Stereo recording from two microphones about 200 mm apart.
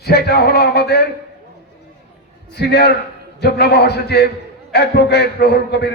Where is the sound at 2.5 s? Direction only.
55° left (ahead or behind).